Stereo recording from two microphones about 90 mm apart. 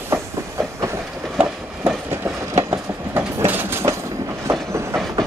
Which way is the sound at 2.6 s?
30° right (ahead or behind).